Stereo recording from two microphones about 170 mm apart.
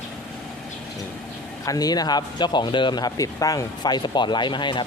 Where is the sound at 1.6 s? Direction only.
20° left (ahead or behind).